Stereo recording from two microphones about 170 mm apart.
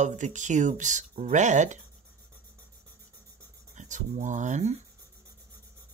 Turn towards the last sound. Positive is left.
turn(degrees=-45)  # may be behind; listen again after turning